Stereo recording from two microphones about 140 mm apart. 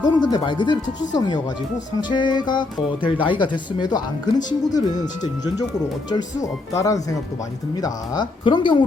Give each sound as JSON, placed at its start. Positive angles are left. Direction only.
{"t": 0.0, "sound": "speech", "side_deg": 30}